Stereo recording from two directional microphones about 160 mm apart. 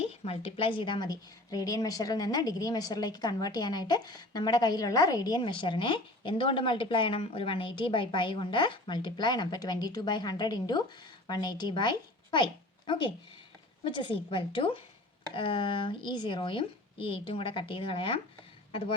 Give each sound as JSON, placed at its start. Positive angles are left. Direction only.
{"t": 0.0, "sound": "a woman's voice", "side_deg": 40}